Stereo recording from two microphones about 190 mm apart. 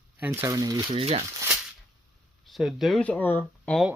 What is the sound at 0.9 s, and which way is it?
Speech, 30° right (ahead or behind).